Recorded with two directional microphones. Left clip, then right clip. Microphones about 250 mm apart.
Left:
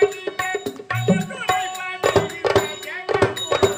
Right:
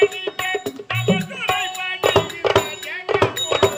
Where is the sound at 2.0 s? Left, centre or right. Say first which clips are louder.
Right 1 dB; centre.